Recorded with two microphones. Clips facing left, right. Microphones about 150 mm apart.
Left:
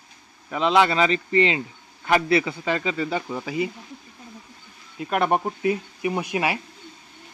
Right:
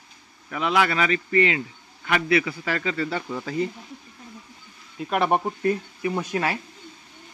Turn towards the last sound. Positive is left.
turn(degrees=15)  # may be behind; listen again after turning